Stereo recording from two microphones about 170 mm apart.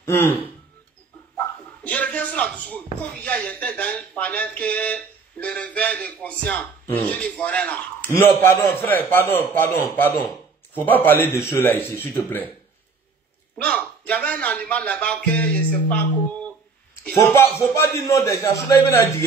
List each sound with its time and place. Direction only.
0.0 s speech: 15° left (ahead or behind)
1.9 s speech: 10° left (ahead or behind)
13.6 s a man's voice: 5° left (ahead or behind)